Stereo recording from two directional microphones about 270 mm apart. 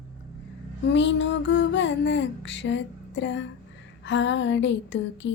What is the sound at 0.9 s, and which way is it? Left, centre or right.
Music, left.